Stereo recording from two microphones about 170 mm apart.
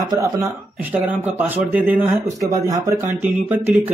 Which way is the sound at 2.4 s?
20° right (ahead or behind).